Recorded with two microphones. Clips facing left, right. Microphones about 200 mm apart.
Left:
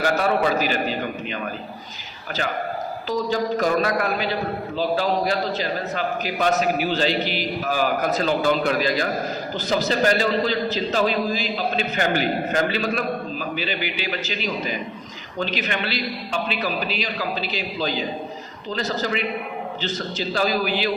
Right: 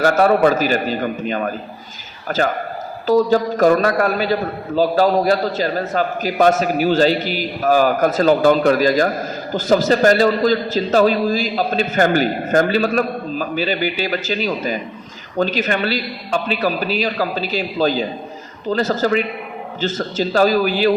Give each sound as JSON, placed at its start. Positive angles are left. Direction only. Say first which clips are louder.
{"t": 0.0, "sound": "a man's voice", "louder": "right 7 dB", "side_deg": -45}